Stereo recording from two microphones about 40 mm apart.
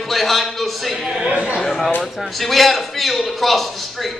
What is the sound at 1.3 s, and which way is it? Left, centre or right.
Speech, right.